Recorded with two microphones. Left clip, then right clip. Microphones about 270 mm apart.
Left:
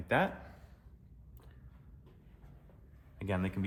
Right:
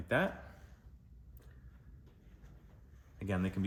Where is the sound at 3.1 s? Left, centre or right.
Left.